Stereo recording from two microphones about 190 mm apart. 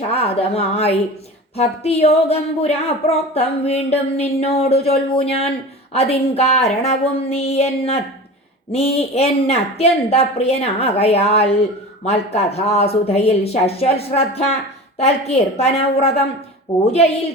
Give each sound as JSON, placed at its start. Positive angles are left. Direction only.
{"t": 0.1, "sound": "a woman's voice", "side_deg": 30}